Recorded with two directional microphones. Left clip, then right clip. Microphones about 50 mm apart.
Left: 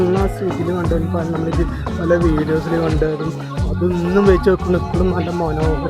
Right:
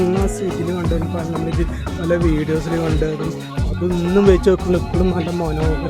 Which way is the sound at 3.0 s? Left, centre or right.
Right.